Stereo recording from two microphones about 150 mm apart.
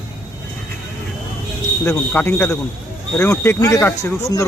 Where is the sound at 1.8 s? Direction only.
15° left (ahead or behind).